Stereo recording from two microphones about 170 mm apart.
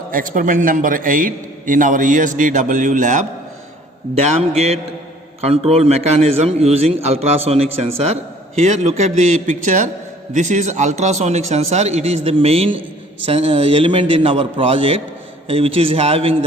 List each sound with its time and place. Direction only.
0.1 s a man's voice: 55° right (ahead or behind); by 16.3 s 35° right (ahead or behind)